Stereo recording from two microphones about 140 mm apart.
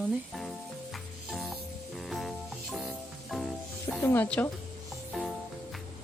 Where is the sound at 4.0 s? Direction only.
15° left (ahead or behind).